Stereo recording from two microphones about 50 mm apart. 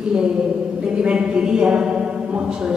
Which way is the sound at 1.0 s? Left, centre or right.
Right.